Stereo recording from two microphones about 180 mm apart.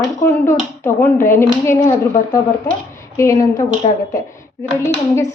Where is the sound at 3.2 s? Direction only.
20° left (ahead or behind).